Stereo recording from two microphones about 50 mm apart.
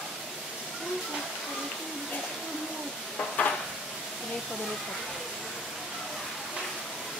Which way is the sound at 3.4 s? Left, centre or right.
Left.